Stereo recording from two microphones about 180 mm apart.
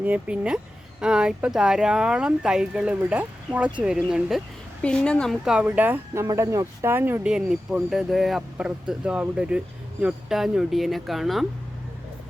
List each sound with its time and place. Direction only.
0.0 s a woman's voice: 5° right (ahead or behind)